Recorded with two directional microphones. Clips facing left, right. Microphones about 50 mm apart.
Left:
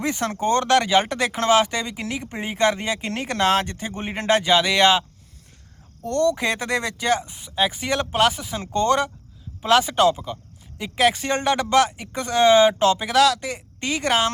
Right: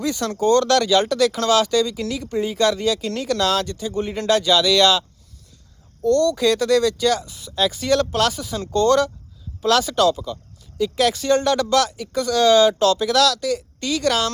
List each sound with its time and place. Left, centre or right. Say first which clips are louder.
0.0 s speech: right 2 dB; left